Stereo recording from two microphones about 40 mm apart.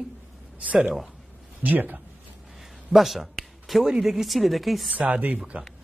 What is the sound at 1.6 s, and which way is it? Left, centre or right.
Speech, right.